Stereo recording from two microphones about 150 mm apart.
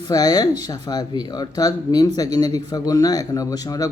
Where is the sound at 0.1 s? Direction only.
25° left (ahead or behind).